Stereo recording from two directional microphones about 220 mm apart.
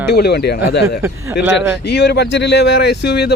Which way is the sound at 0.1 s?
45° left (ahead or behind).